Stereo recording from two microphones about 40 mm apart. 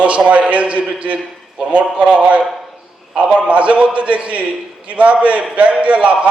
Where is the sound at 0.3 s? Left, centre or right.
Right.